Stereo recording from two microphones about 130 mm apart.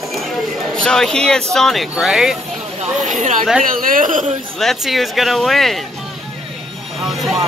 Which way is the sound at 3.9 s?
90° right.